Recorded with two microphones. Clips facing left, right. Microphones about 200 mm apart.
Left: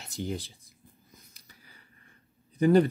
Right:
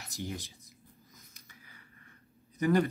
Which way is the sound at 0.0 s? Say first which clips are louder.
Left 5 dB; 30° left (ahead or behind).